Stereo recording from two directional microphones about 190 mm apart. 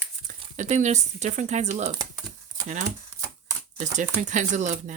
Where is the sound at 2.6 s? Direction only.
20° right (ahead or behind).